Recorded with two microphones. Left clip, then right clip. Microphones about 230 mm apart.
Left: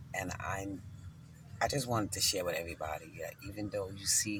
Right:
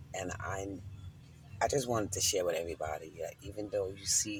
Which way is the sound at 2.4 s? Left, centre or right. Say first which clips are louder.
Right 3 dB; centre.